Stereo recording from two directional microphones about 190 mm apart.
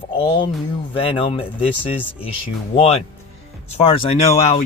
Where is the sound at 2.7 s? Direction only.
30° left (ahead or behind).